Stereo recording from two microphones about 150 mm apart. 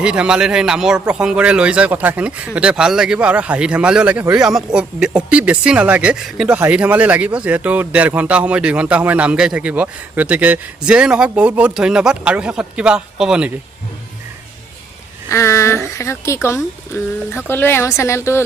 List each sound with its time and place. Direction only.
0.0 s speech: 5° right (ahead or behind)
15.3 s speech: 20° left (ahead or behind)